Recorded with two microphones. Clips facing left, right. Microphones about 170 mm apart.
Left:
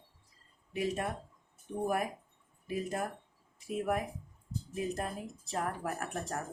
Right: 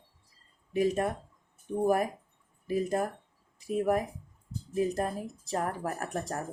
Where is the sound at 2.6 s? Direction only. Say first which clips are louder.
Right 6 dB; 40° right (ahead or behind).